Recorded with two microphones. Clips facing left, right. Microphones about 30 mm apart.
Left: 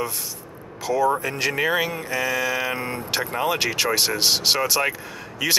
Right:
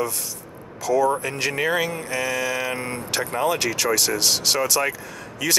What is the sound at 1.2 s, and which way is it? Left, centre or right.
Speech, centre.